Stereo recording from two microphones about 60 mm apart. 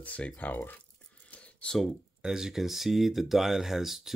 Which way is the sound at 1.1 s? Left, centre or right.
Left.